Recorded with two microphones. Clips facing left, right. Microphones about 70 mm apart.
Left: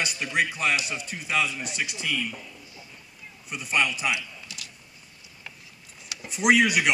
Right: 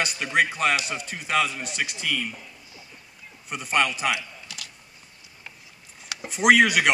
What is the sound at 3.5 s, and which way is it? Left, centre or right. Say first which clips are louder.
Speech: right 2 dB; right.